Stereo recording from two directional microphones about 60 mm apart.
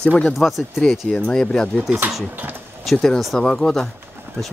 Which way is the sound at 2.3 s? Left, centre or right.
Right.